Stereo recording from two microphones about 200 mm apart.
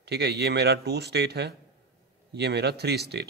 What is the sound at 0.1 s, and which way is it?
Speech, 55° right (ahead or behind).